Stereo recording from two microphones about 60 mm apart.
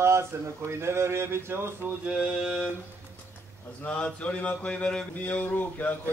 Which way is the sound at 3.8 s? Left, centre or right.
Left.